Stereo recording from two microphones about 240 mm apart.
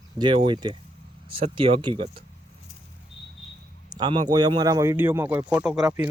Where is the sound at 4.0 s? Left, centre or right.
Centre.